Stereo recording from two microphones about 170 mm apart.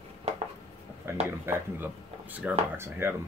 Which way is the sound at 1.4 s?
10° right (ahead or behind).